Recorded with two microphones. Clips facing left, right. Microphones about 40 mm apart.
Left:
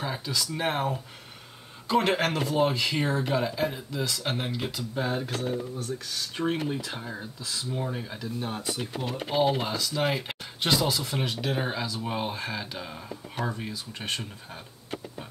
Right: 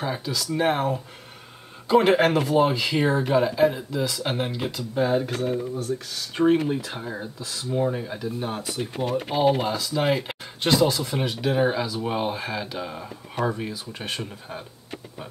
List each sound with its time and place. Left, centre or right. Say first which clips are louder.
0.0 s speech: right 3 dB; centre
5.9 s speech: right 4 dB; centre
8.9 s speech: right 7 dB; right
9.7 s speech: right 4 dB; centre